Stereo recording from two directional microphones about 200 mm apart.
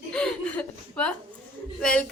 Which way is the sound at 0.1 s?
5° left (ahead or behind).